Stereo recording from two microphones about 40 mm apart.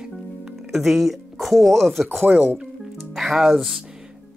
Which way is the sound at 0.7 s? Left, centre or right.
Centre.